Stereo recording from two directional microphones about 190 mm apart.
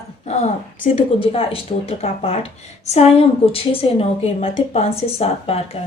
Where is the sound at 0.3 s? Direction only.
35° left (ahead or behind).